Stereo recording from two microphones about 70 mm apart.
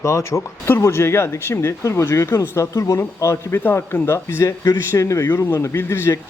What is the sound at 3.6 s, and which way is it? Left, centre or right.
Speech, left.